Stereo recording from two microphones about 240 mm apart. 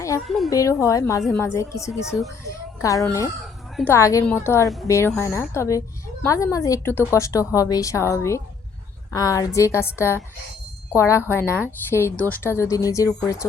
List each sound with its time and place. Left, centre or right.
0.3 s speech: centre
0.5 s a woman's voice: centre
1.9 s speech: centre
2.5 s a woman's voice: centre